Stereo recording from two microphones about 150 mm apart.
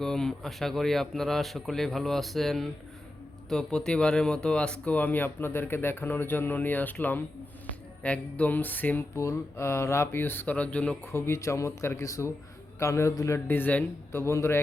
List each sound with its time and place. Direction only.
0.0 s speech: 5° left (ahead or behind)
3.5 s mantra: 5° left (ahead or behind)